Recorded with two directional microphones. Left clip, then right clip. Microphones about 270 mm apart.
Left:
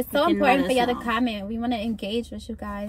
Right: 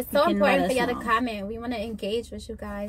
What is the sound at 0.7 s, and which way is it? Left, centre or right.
Speech, centre.